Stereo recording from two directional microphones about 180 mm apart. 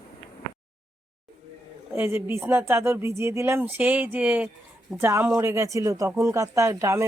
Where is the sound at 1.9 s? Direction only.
15° right (ahead or behind).